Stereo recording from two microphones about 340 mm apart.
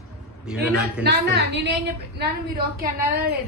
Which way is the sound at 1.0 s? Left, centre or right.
Right.